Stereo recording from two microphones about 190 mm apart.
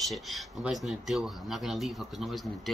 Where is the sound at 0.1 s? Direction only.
Centre (ahead or behind).